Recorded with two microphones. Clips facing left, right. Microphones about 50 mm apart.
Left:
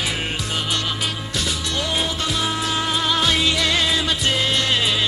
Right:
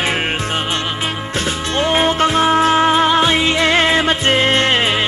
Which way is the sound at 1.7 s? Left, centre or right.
Right.